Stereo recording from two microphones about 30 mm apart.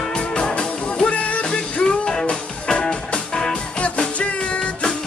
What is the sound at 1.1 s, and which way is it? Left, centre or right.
Music, left.